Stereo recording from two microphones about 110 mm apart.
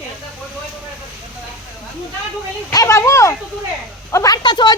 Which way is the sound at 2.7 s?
30° left (ahead or behind).